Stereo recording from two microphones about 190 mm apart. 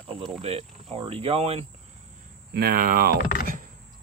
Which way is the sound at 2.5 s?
55° right (ahead or behind).